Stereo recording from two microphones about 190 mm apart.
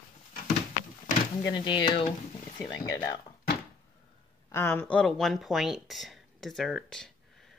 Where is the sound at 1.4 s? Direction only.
25° left (ahead or behind).